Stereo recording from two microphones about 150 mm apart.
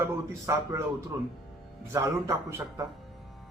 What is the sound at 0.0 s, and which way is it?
Speech, 20° right (ahead or behind).